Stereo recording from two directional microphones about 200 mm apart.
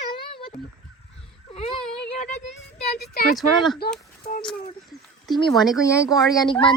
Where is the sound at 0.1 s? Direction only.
25° left (ahead or behind).